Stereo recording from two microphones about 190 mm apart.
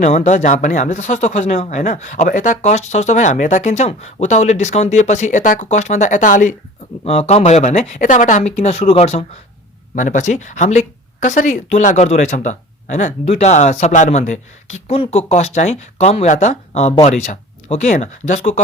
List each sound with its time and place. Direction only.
0.0 s speech: 40° left (ahead or behind)